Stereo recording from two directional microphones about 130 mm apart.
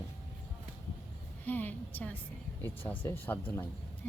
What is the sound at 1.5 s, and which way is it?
Speech, 15° left (ahead or behind).